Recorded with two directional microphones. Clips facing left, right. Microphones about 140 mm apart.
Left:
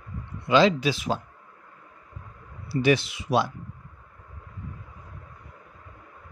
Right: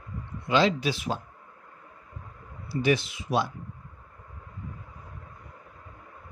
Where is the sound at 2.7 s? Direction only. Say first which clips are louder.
Left 3 dB; 85° left.